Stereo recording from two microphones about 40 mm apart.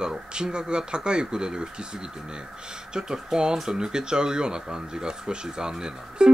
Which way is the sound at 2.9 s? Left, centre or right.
Centre.